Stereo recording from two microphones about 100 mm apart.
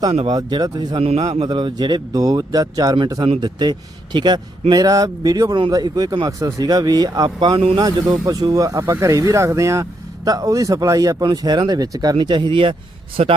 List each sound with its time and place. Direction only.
0.3 s speech: 45° right (ahead or behind)
0.9 s a man's voice: 75° right (ahead or behind)
1.5 s speech: 50° right (ahead or behind); by 11.3 s 35° right (ahead or behind)
11.3 s speech: 50° right (ahead or behind)
13.2 s a man's voice: 90° right